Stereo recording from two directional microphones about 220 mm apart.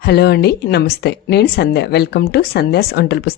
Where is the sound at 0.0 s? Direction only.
50° left (ahead or behind).